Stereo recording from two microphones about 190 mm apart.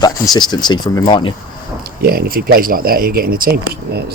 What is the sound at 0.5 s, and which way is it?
Speech, 20° left (ahead or behind).